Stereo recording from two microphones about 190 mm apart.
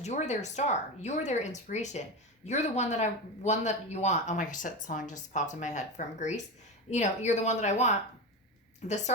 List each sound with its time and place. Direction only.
0.0 s speech: 35° left (ahead or behind)